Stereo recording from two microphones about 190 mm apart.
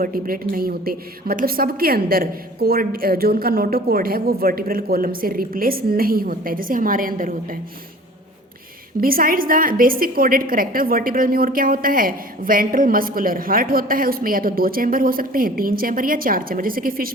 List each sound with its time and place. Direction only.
0.0 s a woman's voice: 50° right (ahead or behind)
9.0 s a woman's voice: 50° right (ahead or behind)